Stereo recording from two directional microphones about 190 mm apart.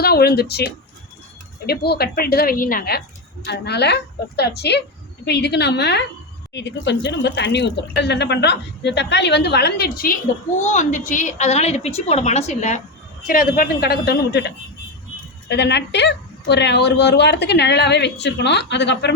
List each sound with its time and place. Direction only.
0.0 s a woman's voice: 55° left (ahead or behind)
10.6 s a woman's voice: 40° left (ahead or behind)
13.2 s speech: 50° left (ahead or behind); by 19.1 s 65° left (ahead or behind)